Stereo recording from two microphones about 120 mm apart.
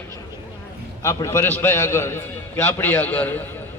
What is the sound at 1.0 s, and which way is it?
A man's voice, 25° left (ahead or behind).